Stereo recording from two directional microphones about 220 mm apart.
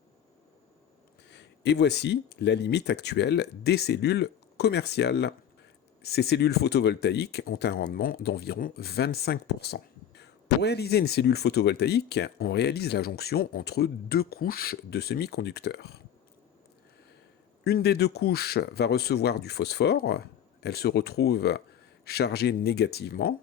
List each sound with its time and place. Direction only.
1.3 s speech: 50° left (ahead or behind)
17.6 s speech: 45° left (ahead or behind)